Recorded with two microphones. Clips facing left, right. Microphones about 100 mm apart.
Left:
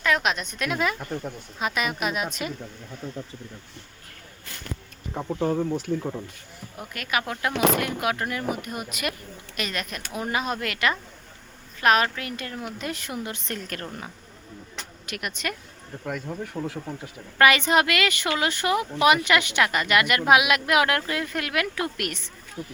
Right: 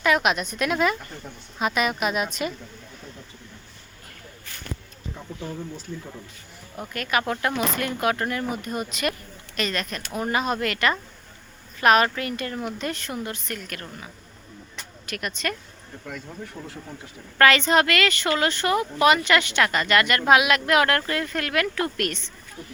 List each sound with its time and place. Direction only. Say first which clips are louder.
0.0 s speech: right 3 dB; 5° right (ahead or behind)
5.1 s speech: left 10 dB; 50° left (ahead or behind)
6.7 s a woman's voice: right 3 dB; 5° left (ahead or behind); by 13.5 s 20° left (ahead or behind)
13.5 s a woman's voice: left 1 dB; 35° left (ahead or behind)
15.0 s speech: right 2 dB; 15° left (ahead or behind)
16.6 s speech: left 6 dB; 10° left (ahead or behind)